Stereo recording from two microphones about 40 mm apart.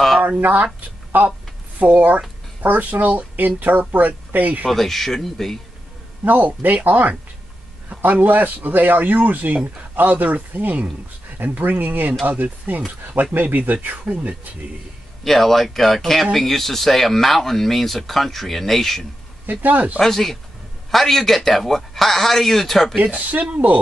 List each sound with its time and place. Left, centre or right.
0.4 s speech: right
0.7 s a sound: right
1.8 s speech: right
4.6 s speech: centre
6.2 s speech: right
15.2 s speech: centre
19.4 s speech: right
20.0 s speech: centre
22.9 s speech: right
23.5 s speech: right